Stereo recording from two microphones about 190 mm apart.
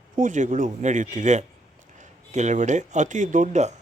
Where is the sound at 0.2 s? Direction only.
40° right (ahead or behind).